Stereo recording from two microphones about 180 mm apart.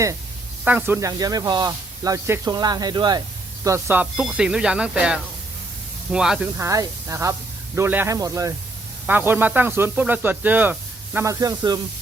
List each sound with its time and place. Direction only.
0.6 s speech: 10° right (ahead or behind)
6.6 s speech: 15° right (ahead or behind)